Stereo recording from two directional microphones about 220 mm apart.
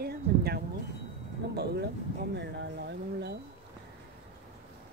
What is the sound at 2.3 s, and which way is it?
Speech, 50° right (ahead or behind).